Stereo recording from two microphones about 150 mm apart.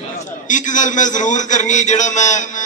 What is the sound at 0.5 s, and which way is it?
A man's voice, 55° left (ahead or behind).